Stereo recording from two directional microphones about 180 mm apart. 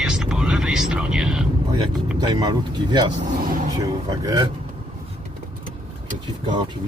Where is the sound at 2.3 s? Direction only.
25° right (ahead or behind).